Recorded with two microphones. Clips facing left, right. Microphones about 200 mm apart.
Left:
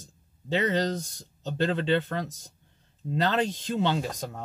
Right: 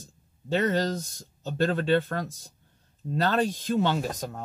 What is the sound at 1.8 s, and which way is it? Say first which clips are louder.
Speech: right 2 dB; 20° left (ahead or behind).